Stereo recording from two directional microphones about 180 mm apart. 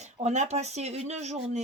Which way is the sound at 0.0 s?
40° right (ahead or behind).